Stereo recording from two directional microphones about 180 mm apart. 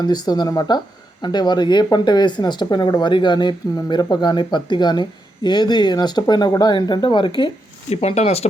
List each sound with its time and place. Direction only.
0.0 s speech: 20° left (ahead or behind)